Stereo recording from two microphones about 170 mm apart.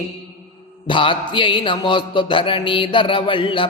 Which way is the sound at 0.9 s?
30° left (ahead or behind).